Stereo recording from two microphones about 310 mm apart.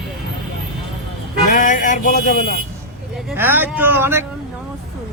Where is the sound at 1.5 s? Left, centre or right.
Left.